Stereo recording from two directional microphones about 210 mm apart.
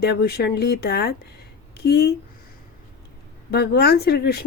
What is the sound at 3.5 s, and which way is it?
Speech, 50° left (ahead or behind).